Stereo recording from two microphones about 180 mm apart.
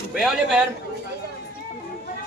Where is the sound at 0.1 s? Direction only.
Centre (ahead or behind).